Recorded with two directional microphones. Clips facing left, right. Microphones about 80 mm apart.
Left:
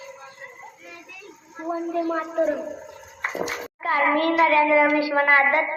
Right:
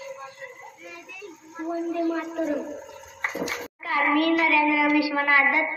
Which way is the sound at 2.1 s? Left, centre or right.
Left.